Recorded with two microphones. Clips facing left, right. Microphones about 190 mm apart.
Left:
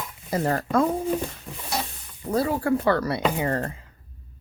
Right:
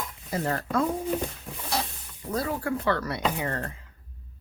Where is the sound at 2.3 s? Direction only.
30° left (ahead or behind).